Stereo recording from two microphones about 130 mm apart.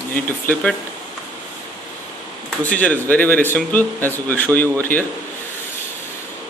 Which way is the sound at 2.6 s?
10° left (ahead or behind).